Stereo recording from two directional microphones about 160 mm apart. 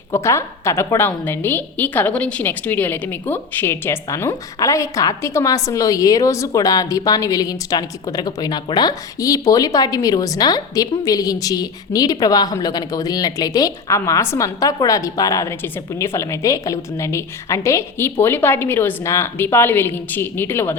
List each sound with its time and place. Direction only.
0.1 s a woman's voice: 15° left (ahead or behind)